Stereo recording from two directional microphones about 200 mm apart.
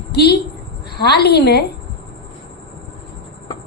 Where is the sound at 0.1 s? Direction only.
55° left (ahead or behind).